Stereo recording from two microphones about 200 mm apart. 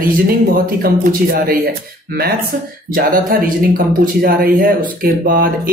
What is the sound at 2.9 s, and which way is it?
Speech, 45° right (ahead or behind).